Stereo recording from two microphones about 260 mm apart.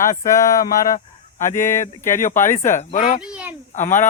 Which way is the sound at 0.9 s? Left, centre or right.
Left.